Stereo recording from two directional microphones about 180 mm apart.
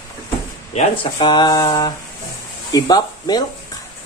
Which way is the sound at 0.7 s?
30° left (ahead or behind).